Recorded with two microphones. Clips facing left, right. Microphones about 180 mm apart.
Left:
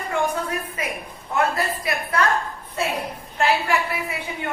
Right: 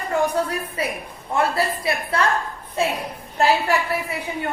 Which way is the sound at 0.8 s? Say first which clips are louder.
Right 3 dB; 35° right (ahead or behind).